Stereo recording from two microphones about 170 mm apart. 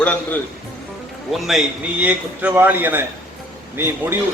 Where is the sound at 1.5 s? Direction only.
5° right (ahead or behind).